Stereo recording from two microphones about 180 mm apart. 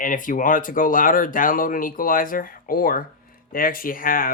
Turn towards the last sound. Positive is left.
turn(degrees=50)  # may be behind; listen again after turning